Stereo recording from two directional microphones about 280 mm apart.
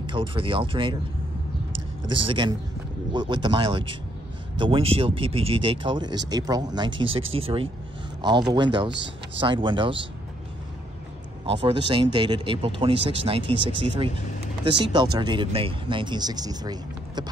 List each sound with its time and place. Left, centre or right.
0.0 s speech: centre
2.0 s speech: centre
8.9 s speech: right
9.4 s speech: centre
11.4 s speech: centre